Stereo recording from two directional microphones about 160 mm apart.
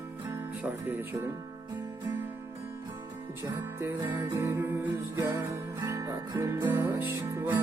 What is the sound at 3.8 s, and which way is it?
Music, 15° right (ahead or behind).